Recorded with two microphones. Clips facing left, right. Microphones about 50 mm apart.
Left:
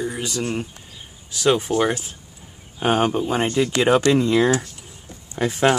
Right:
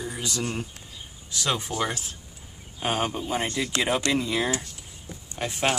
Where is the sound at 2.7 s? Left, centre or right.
Left.